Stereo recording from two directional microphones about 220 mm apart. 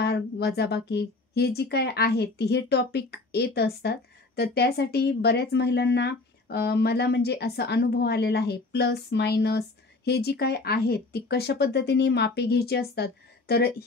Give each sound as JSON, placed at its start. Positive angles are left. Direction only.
{"t": 0.0, "sound": "a woman's voice", "side_deg": 50}